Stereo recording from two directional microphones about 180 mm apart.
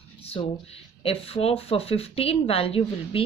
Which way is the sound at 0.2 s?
35° left (ahead or behind).